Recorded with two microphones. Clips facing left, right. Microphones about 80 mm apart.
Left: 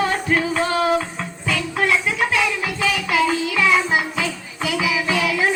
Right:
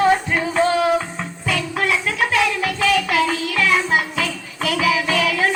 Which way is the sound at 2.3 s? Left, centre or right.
Centre.